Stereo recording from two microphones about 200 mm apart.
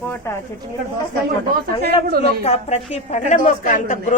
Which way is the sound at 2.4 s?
35° left (ahead or behind).